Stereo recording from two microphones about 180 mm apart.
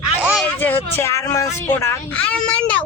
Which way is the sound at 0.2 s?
5° right (ahead or behind).